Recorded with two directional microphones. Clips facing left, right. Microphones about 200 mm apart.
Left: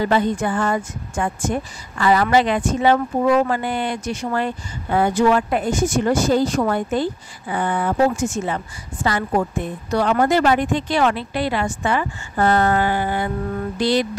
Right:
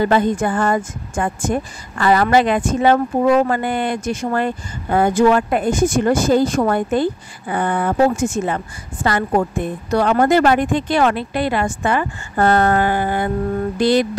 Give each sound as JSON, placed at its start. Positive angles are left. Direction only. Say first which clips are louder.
{"t": 0.0, "sound": "speech", "louder": "right 3 dB", "side_deg": -50}